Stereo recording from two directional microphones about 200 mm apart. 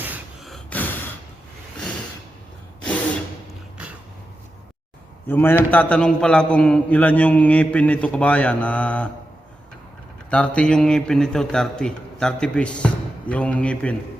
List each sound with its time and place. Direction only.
0.0 s a sound: 5° right (ahead or behind)
5.3 s a man's voice: 10° left (ahead or behind)
10.2 s a man's voice: 5° left (ahead or behind)